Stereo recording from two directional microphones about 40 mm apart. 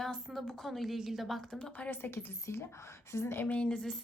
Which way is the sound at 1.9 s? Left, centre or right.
Left.